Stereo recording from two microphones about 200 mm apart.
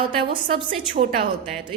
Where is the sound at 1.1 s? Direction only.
40° right (ahead or behind).